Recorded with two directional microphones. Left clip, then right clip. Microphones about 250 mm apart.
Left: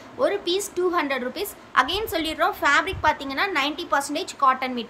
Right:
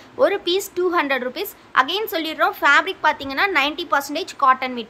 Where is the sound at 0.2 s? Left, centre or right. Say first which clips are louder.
Right 5 dB; centre.